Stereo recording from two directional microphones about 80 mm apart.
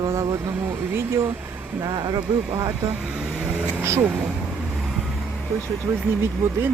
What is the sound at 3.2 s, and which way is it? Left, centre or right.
Vehicle, centre.